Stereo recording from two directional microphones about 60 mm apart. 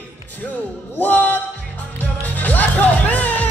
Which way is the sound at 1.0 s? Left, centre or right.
Left.